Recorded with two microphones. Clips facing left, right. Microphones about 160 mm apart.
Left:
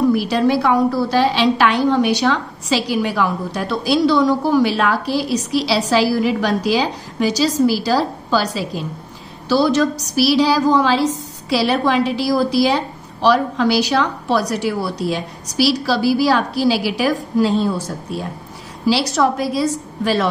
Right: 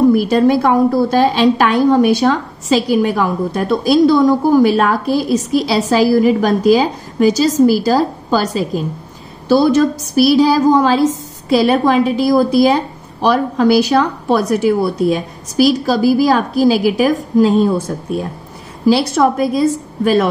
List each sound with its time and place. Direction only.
0.1 s a woman's voice: 45° right (ahead or behind)
18.9 s a woman's voice: 50° right (ahead or behind)